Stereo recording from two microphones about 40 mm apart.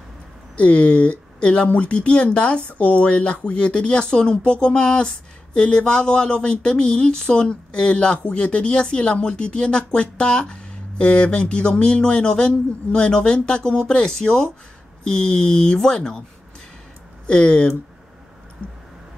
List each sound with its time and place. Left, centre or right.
0.6 s speech: left
1.7 s speech: left
2.0 s speech: left
17.3 s speech: left